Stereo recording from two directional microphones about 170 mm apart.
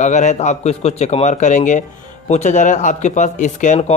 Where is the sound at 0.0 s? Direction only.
45° left (ahead or behind).